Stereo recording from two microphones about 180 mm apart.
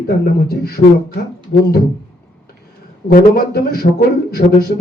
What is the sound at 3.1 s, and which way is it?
Speech, 60° left (ahead or behind).